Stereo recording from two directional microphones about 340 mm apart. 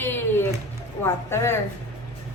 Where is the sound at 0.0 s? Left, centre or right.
Centre.